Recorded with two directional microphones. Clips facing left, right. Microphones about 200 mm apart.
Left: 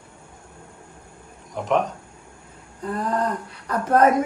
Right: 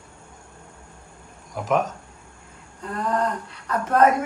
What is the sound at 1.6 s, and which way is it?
Speech, centre (ahead or behind).